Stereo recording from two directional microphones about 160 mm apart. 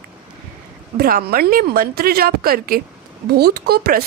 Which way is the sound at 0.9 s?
70° right (ahead or behind).